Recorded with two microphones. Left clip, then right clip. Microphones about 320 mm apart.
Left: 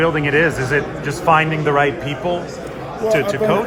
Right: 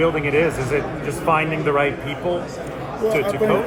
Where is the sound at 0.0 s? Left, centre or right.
Left.